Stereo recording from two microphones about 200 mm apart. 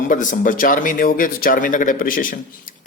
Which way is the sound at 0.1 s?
40° left (ahead or behind).